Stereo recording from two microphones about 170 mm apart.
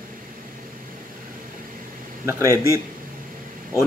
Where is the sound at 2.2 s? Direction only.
20° right (ahead or behind).